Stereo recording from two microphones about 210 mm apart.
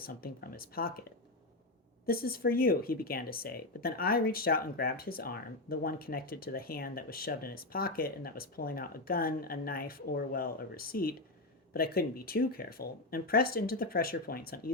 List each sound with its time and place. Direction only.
0.0 s speech: 45° left (ahead or behind)
2.0 s speech: 45° left (ahead or behind)